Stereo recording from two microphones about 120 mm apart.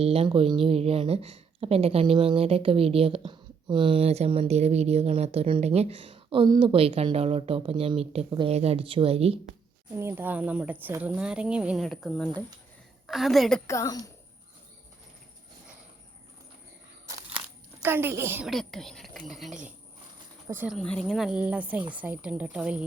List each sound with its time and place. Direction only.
0.0 s speech: 55° right (ahead or behind)
4.0 s speech: 60° right (ahead or behind)
9.9 s speech: 20° right (ahead or behind)
11.9 s speech: 5° left (ahead or behind)
13.7 s a woman's voice: 25° left (ahead or behind)
17.8 s a woman's voice: 20° right (ahead or behind)
18.4 s speech: centre (ahead or behind)
20.7 s speech: 5° left (ahead or behind)
21.1 s speech: 5° right (ahead or behind)